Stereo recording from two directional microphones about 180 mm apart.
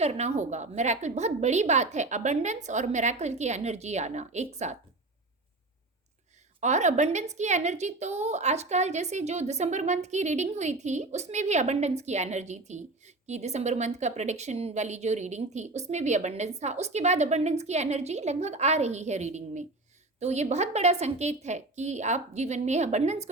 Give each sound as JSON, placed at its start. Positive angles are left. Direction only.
{"t": 0.0, "sound": "a woman's voice", "side_deg": -35}
{"t": 6.6, "sound": "a woman's voice", "side_deg": -40}